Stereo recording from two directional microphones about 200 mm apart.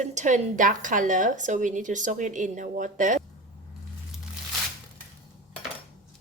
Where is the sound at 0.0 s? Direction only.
35° right (ahead or behind).